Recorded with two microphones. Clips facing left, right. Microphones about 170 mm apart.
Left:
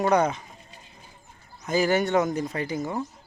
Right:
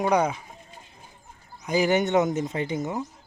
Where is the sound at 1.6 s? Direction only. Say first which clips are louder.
Right 1 dB; 15° right (ahead or behind).